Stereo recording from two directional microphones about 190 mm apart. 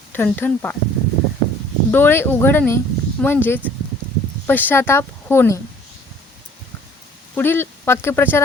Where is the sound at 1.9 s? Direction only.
10° left (ahead or behind).